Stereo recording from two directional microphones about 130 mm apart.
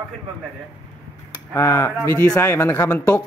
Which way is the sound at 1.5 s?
25° left (ahead or behind).